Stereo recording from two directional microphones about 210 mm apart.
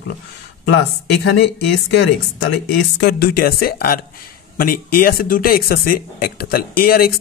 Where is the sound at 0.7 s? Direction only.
50° left (ahead or behind).